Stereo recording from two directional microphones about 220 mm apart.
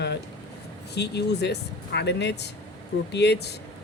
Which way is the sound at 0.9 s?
50° left (ahead or behind).